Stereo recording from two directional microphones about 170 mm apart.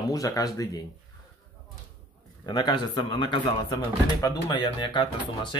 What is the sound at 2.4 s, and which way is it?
Speech, 25° left (ahead or behind).